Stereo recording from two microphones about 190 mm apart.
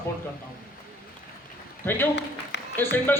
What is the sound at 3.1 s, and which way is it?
Speech, 10° left (ahead or behind).